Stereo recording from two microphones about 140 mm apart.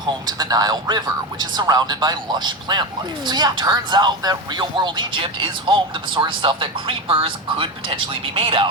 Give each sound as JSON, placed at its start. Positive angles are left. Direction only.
{"t": 0.0, "sound": "speech", "side_deg": -30}